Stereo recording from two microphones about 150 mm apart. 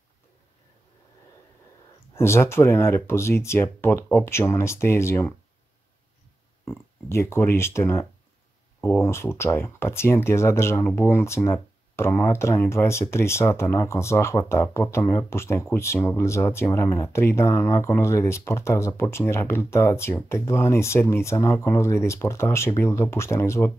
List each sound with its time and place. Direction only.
2.1 s speech: 15° left (ahead or behind)
6.7 s speech: 20° left (ahead or behind)